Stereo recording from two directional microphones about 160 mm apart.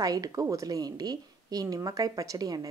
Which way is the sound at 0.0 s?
20° right (ahead or behind).